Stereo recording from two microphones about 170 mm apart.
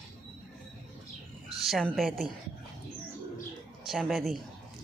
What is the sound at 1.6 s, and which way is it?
Speech, centre (ahead or behind).